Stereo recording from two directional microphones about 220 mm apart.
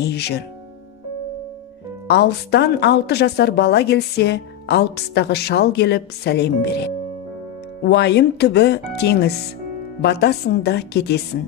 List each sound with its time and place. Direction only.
0.0 s a woman's voice: 50° left (ahead or behind)
2.0 s a woman's voice: 50° left (ahead or behind)